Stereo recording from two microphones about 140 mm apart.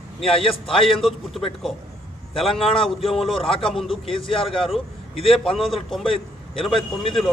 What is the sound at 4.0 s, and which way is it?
Speech, 40° left (ahead or behind).